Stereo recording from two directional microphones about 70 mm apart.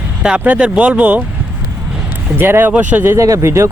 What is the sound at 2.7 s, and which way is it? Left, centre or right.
Speech, right.